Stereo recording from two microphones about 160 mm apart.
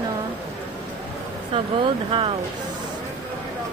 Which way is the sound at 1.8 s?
35° right (ahead or behind).